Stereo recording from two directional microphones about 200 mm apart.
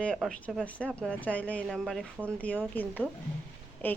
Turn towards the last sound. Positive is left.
turn(degrees=10)  # may be behind; listen again after turning